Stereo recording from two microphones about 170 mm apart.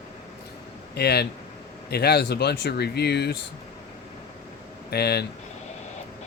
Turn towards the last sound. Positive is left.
turn(degrees=70)  # may be behind; listen again after turning